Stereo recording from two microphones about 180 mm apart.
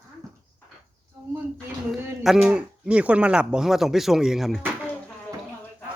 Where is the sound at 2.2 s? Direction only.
5° right (ahead or behind).